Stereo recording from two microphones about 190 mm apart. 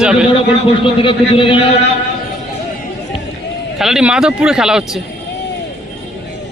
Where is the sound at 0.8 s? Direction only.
30° left (ahead or behind).